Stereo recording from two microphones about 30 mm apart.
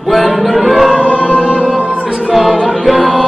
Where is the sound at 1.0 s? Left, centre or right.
Right.